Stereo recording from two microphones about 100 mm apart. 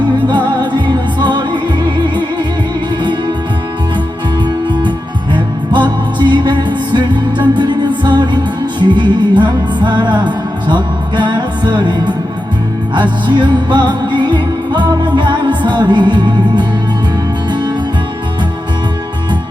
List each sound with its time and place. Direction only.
0.3 s music: 50° right (ahead or behind)
3.0 s music: 50° right (ahead or behind)
5.3 s music: 50° right (ahead or behind)